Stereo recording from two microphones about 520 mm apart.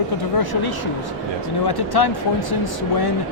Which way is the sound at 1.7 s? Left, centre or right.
Left.